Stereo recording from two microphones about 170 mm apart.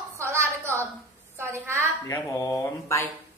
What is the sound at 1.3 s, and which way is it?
Speech, 15° right (ahead or behind).